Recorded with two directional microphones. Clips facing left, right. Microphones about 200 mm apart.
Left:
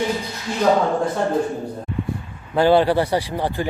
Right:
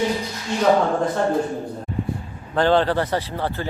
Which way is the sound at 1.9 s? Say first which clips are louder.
Even; 40° right (ahead or behind).